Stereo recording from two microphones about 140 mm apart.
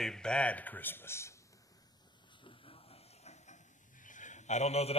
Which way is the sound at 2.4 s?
40° left (ahead or behind).